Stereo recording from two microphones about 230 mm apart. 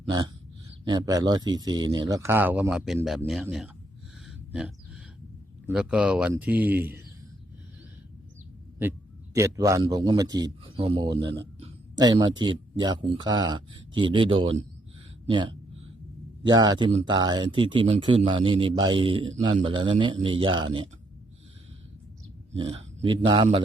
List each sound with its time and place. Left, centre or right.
0.0 s speech: centre
4.3 s a sound: centre
5.6 s speech: centre
9.3 s a man's voice: centre
22.7 s speech: right